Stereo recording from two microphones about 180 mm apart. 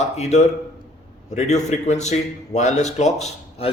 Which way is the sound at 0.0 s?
40° left (ahead or behind).